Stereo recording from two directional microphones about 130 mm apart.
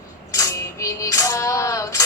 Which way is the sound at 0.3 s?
25° left (ahead or behind).